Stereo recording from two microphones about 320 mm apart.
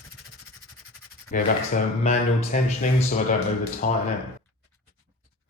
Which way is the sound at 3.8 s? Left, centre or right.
Left.